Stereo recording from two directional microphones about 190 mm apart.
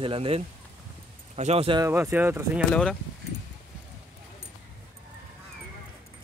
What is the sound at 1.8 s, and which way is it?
Speech, 10° right (ahead or behind).